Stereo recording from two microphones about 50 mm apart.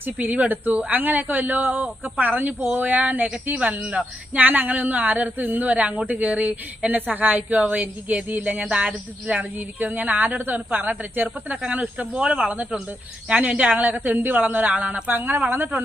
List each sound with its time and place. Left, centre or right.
0.0 s a woman's voice: right
3.8 s speech: right
4.4 s a woman's voice: right
11.7 s a woman's voice: right
15.1 s a woman's voice: right